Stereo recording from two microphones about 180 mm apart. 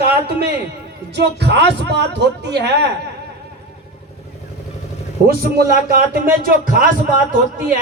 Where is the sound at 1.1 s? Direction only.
70° right (ahead or behind).